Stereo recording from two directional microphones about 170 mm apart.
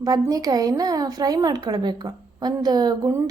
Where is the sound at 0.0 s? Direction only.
20° right (ahead or behind).